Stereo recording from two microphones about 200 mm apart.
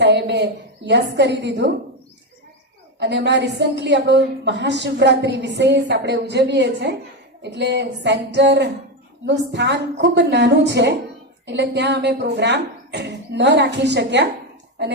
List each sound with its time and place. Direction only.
0.0 s a woman's voice: 60° right (ahead or behind)
3.0 s a woman's voice: 60° right (ahead or behind)